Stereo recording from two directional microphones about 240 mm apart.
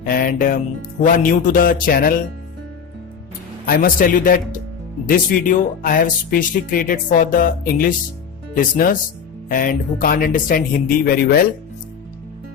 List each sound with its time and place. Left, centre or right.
0.0 s speech: left
3.7 s speech: left